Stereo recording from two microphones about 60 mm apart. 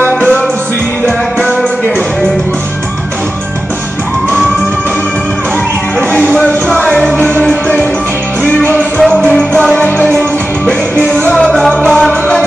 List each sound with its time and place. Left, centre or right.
0.0 s music: left
6.3 s music: centre
8.6 s music: left
9.1 s music: centre
9.8 s music: left
11.5 s music: centre